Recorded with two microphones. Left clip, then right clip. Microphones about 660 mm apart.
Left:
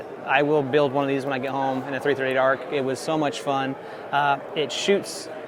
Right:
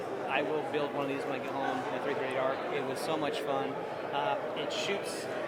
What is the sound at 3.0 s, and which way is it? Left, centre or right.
A man's voice, left.